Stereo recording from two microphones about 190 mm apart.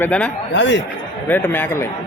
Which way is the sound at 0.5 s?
70° left (ahead or behind).